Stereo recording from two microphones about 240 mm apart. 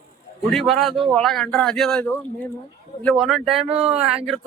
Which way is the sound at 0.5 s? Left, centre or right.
Centre.